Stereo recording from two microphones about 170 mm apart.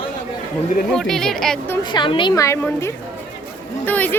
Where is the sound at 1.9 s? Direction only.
30° left (ahead or behind).